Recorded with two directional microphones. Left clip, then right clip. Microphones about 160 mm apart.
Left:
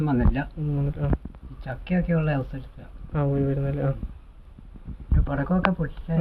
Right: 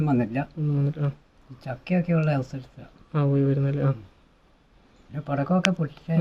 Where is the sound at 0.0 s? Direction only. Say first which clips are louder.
Even; 25° right (ahead or behind).